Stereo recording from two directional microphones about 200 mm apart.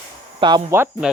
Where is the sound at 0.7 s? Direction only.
10° right (ahead or behind).